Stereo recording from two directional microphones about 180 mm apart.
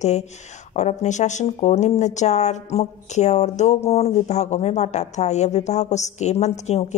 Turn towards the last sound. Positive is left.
turn(degrees=40)  # may be behind; listen again after turning